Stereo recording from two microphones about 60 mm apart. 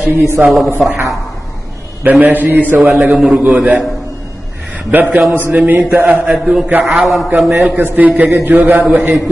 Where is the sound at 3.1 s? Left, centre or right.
Centre.